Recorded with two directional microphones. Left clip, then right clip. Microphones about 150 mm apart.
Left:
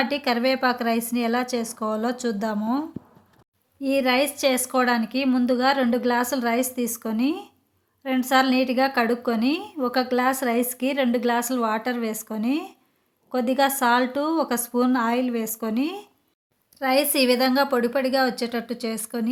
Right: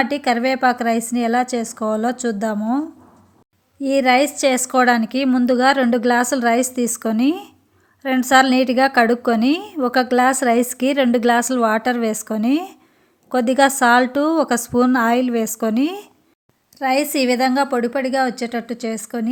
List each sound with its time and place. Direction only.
0.0 s speech: 30° right (ahead or behind)
3.8 s a woman's voice: 35° right (ahead or behind)
16.7 s speech: 25° right (ahead or behind)